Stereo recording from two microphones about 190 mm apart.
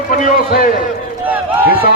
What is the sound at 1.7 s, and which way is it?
Speech, 50° left (ahead or behind).